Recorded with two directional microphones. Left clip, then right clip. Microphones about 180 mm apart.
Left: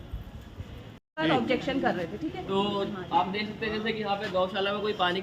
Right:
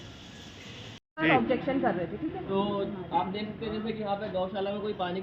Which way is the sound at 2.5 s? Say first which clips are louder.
Left 2 dB; 35° left (ahead or behind).